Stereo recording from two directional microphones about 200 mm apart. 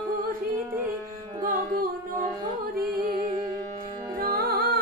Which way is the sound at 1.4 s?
45° right (ahead or behind).